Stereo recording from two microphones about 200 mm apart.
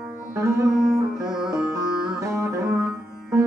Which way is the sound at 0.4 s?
15° right (ahead or behind).